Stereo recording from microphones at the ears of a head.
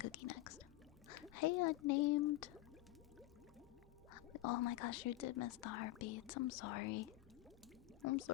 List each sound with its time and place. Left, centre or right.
0.0 s drip: left
1.0 s a sound: left
4.1 s speech: left